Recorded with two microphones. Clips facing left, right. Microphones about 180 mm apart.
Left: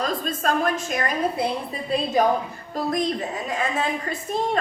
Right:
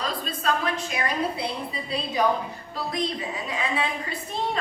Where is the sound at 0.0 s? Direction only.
45° left (ahead or behind).